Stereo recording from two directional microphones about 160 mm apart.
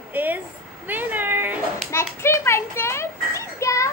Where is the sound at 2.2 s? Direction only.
15° left (ahead or behind).